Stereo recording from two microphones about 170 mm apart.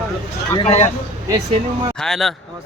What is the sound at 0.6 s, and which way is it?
Speech, 40° left (ahead or behind).